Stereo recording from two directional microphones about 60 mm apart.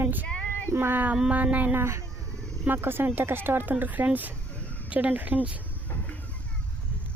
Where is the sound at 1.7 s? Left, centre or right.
Right.